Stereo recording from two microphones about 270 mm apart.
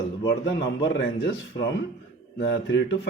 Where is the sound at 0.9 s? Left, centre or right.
Left.